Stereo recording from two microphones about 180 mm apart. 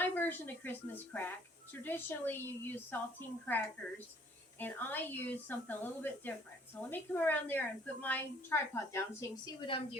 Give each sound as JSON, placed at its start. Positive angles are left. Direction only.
{"t": 0.0, "sound": "a woman's voice", "side_deg": 10}
{"t": 9.6, "sound": "a woman's voice", "side_deg": 30}